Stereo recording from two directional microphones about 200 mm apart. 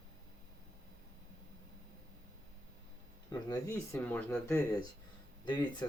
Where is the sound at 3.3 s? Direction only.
15° left (ahead or behind).